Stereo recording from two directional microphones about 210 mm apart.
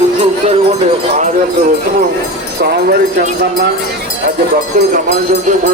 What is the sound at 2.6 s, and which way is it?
Speech, 45° right (ahead or behind).